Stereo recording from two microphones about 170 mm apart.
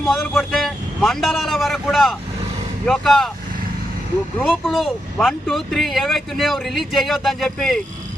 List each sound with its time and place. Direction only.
0.0 s speech: centre (ahead or behind)
4.4 s speech: centre (ahead or behind)